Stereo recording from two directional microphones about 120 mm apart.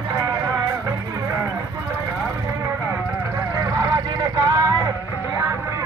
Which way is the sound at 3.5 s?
25° right (ahead or behind).